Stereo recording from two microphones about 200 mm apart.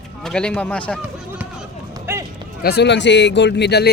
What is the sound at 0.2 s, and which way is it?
Speech, 5° left (ahead or behind).